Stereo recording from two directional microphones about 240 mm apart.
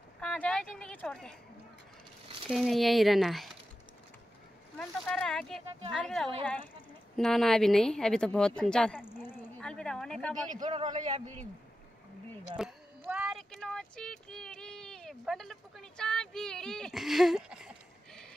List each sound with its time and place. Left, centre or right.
0.2 s a sound: centre
2.5 s speech: centre
4.7 s speech: centre
10.6 s speech: centre
10.9 s speech: right
12.5 s speech: centre